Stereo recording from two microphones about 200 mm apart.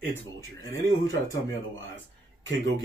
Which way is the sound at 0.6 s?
15° left (ahead or behind).